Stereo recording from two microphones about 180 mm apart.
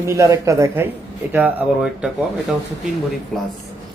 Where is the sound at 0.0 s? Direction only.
15° right (ahead or behind).